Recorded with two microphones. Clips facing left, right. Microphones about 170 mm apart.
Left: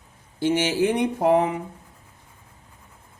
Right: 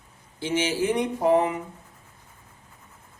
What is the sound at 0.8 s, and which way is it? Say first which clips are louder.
Speech: left 3 dB; 60° left (ahead or behind).